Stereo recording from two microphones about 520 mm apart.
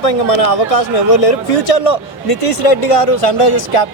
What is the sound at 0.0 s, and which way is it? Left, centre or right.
A man's voice, left.